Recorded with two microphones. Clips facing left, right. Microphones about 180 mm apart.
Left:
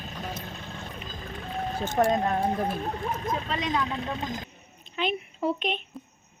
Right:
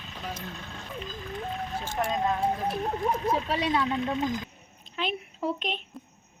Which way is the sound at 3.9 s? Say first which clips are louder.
Right 4 dB; 35° left (ahead or behind).